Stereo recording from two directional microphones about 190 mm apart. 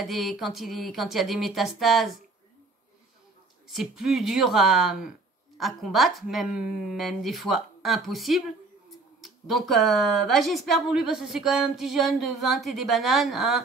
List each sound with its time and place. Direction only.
0.0 s speech: centre (ahead or behind)
3.6 s speech: centre (ahead or behind)